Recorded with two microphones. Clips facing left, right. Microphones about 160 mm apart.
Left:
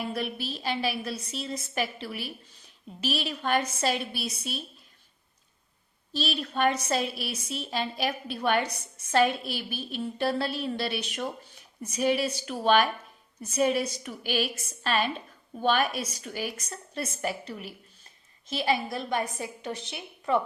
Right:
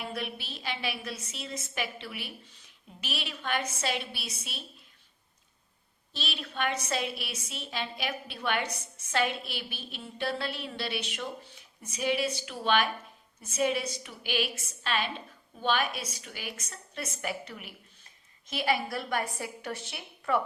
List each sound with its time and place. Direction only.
0.1 s a woman's voice: 35° left (ahead or behind)
6.1 s a woman's voice: 40° left (ahead or behind); by 20.4 s 20° left (ahead or behind)